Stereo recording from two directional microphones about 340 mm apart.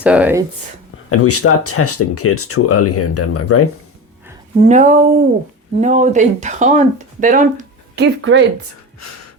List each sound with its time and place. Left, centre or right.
0.0 s speech: centre
1.1 s speech: left
4.7 s speech: right